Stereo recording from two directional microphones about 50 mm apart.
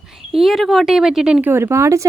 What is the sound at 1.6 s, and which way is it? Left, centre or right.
Speech, right.